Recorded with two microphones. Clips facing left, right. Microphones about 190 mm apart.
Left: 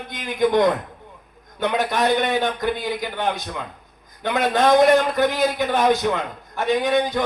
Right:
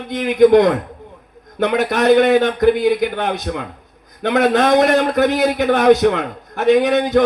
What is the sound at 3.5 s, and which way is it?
A man's voice, 60° right (ahead or behind).